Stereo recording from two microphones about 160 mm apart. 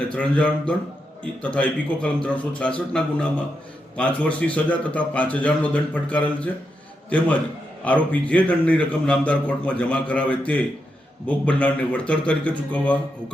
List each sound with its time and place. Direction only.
0.1 s a man's voice: 5° left (ahead or behind)
7.9 s a man's voice: 10° left (ahead or behind)